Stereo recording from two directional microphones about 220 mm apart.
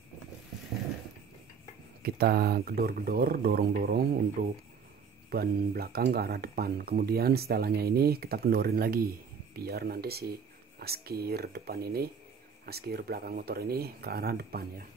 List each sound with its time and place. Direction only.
2.0 s speech: 45° right (ahead or behind)